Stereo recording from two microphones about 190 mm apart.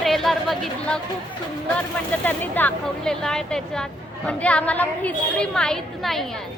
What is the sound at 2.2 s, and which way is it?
A woman's voice, 10° left (ahead or behind).